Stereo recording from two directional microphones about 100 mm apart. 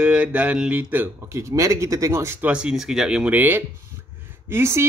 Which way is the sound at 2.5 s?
10° right (ahead or behind).